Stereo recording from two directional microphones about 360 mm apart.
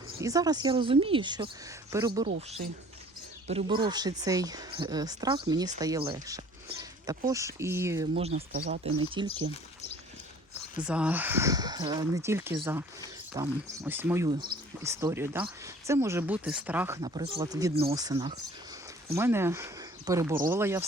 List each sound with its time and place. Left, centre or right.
0.2 s speech: centre
3.4 s speech: centre
10.8 s speech: centre